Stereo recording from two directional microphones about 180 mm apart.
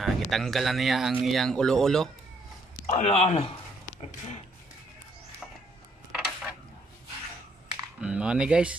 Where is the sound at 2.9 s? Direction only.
35° left (ahead or behind).